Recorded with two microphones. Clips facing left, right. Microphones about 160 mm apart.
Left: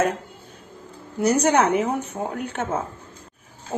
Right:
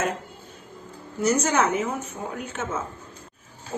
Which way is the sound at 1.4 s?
65° left (ahead or behind).